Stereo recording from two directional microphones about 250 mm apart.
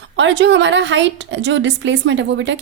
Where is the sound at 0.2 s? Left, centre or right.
Right.